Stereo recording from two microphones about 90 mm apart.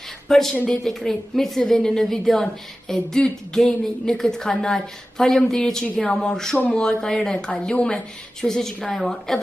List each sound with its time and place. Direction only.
0.3 s a woman's voice: 5° left (ahead or behind)